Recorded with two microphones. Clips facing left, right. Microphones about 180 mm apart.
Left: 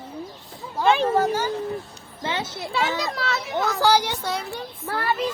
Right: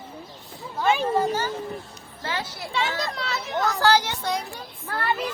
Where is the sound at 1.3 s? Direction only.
10° left (ahead or behind).